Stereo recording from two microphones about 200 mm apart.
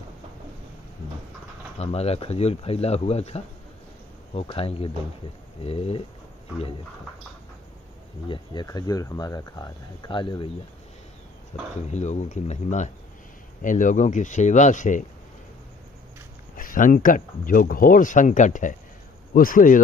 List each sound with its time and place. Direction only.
1.8 s speech: 30° left (ahead or behind)
8.3 s speech: 20° left (ahead or behind)
11.5 s speech: 35° left (ahead or behind)
16.5 s speech: 45° left (ahead or behind)